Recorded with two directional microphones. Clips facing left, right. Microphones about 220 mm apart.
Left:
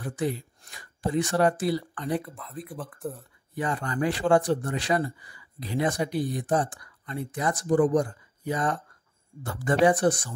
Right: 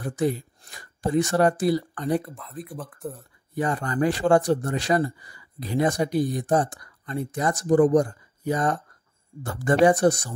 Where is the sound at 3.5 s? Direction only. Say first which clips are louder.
Right 4 dB; 40° right (ahead or behind).